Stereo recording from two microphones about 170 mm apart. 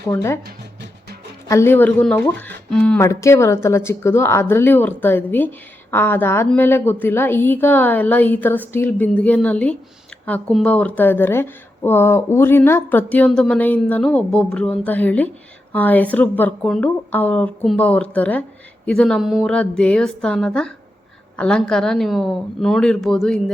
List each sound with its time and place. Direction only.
0.1 s speech: 15° left (ahead or behind)
1.5 s speech: 15° left (ahead or behind)
3.0 s a woman's voice: 15° left (ahead or behind); by 23.4 s centre (ahead or behind)